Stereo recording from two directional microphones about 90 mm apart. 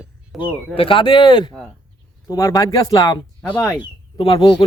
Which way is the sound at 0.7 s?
80° left.